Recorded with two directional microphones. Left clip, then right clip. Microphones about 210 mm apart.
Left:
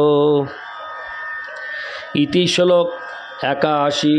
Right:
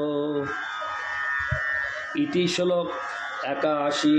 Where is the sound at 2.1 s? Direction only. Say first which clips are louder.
Left 10 dB; 55° left (ahead or behind).